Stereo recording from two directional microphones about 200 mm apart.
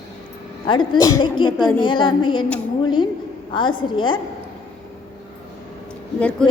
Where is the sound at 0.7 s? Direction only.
20° left (ahead or behind).